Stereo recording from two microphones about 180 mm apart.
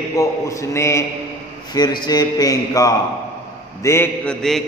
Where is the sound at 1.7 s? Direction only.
25° left (ahead or behind); by 4.7 s centre (ahead or behind).